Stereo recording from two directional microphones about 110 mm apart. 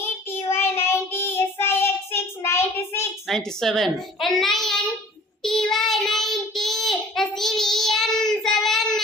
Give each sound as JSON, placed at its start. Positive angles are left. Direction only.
{"t": 0.5, "sound": "child singing", "side_deg": 20}
{"t": 3.2, "sound": "a child's voice", "side_deg": 5}
{"t": 5.4, "sound": "child singing", "side_deg": 5}